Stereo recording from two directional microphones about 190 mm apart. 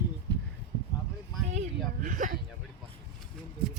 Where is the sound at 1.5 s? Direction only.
40° right (ahead or behind).